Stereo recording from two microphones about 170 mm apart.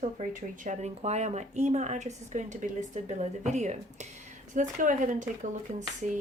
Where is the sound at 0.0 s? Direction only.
50° right (ahead or behind).